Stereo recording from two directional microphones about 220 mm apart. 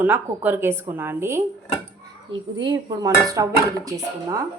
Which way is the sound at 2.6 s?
20° right (ahead or behind).